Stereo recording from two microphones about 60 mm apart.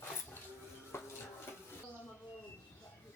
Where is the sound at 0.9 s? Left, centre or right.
Left.